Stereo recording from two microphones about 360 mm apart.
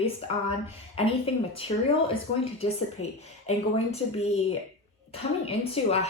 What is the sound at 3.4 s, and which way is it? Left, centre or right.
Speech, centre.